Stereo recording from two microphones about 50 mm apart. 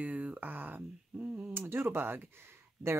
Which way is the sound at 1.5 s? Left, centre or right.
Right.